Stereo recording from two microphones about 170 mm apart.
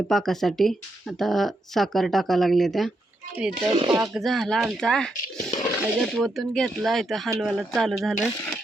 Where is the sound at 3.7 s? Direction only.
25° right (ahead or behind).